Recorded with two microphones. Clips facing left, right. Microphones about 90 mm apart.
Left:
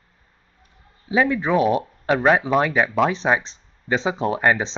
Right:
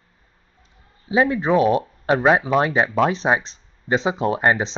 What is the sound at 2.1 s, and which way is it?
Speech, 15° right (ahead or behind).